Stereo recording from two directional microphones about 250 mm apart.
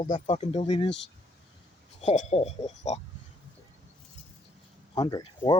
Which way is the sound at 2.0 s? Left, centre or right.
Left.